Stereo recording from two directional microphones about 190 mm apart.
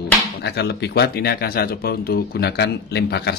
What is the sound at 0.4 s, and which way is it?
Speech, 60° left (ahead or behind).